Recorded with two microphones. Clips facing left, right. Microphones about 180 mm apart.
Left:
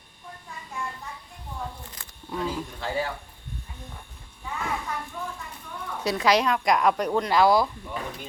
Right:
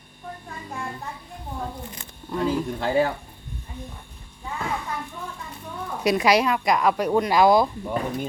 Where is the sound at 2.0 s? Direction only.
20° right (ahead or behind).